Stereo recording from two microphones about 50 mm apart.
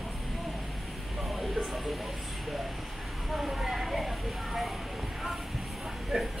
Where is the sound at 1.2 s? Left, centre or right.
Centre.